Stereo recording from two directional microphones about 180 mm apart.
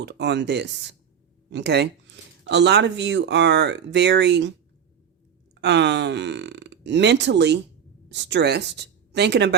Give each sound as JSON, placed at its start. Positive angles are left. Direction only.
{"t": 0.0, "sound": "speech", "side_deg": -75}
{"t": 5.5, "sound": "speech", "side_deg": -75}